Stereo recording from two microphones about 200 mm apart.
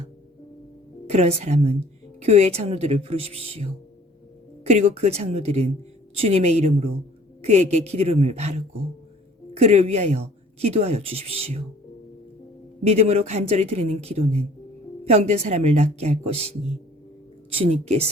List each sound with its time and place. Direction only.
1.0 s speech: 35° right (ahead or behind)
12.8 s speech: 35° right (ahead or behind)
17.6 s speech: 30° right (ahead or behind)